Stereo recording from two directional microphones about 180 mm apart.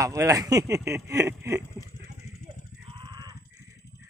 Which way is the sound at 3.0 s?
20° right (ahead or behind).